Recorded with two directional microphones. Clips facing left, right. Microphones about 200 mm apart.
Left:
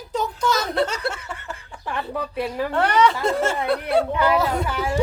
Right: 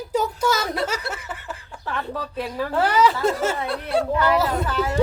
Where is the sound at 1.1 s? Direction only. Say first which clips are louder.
Left 2 dB; 5° right (ahead or behind).